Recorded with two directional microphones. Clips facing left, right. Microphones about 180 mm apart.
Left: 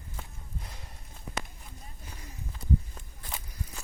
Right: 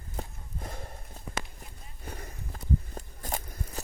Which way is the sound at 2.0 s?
55° right (ahead or behind).